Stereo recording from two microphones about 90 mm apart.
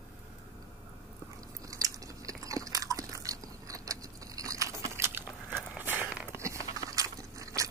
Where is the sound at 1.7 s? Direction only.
40° right (ahead or behind); by 6.0 s 20° right (ahead or behind).